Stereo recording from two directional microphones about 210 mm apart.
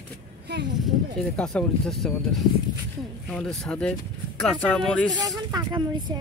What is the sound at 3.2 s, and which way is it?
Speech, 5° left (ahead or behind).